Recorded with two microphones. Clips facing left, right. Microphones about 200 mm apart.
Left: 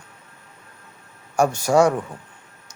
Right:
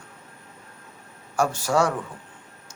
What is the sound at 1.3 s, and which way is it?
Speech, 15° left (ahead or behind).